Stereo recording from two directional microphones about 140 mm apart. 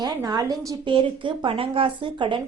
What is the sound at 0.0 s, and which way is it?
A woman's voice, 30° right (ahead or behind).